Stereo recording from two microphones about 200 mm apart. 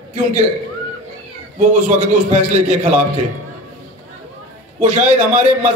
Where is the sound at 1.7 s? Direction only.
35° right (ahead or behind).